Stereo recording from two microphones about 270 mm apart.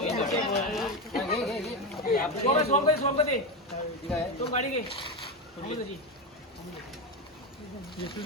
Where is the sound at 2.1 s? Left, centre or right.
Left.